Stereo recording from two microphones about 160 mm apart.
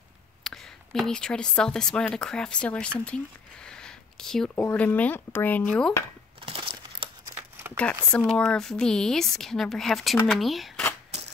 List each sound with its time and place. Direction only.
0.4 s speech: centre (ahead or behind)
6.4 s crumpling: 35° right (ahead or behind)
7.3 s a sound: 15° right (ahead or behind)
8.2 s speech: centre (ahead or behind)